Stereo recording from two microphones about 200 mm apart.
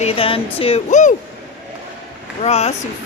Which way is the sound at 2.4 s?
30° left (ahead or behind).